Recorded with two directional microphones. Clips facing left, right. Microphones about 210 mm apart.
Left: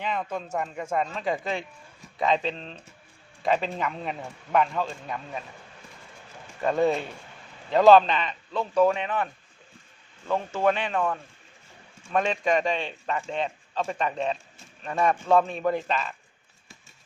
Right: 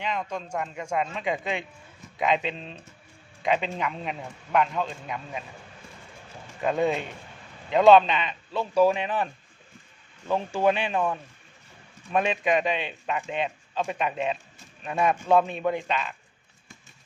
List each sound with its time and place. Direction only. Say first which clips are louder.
0.0 s speech: left 1 dB; 5° left (ahead or behind)
6.6 s speech: left 1 dB; centre (ahead or behind)
12.1 s speech: even; 10° right (ahead or behind)